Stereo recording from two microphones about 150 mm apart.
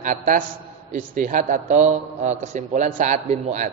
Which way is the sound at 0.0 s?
60° right (ahead or behind).